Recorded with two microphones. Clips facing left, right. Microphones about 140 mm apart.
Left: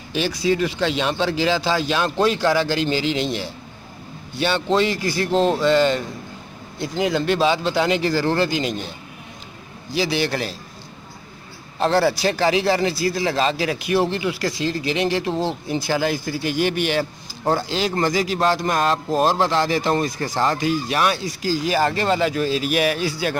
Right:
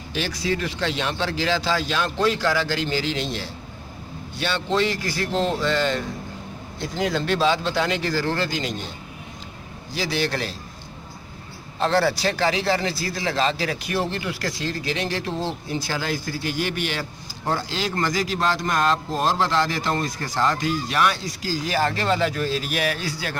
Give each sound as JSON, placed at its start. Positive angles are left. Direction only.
{"t": 0.1, "sound": "speech", "side_deg": 15}
{"t": 9.9, "sound": "speech", "side_deg": 15}
{"t": 12.3, "sound": "speech", "side_deg": 15}